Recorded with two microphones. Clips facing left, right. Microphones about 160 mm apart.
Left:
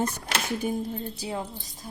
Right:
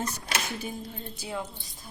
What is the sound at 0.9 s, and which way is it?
Speech, 35° left (ahead or behind).